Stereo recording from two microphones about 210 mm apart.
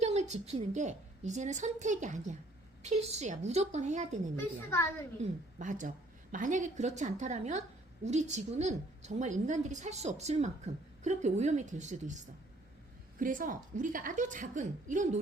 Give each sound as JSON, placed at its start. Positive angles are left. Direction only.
{"t": 0.0, "sound": "a woman's voice", "side_deg": -30}
{"t": 4.4, "sound": "a woman's voice", "side_deg": 10}
{"t": 5.2, "sound": "a woman's voice", "side_deg": -35}
{"t": 13.1, "sound": "a woman's voice", "side_deg": -40}